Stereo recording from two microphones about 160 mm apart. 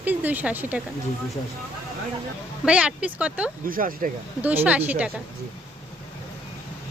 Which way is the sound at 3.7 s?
60° right (ahead or behind).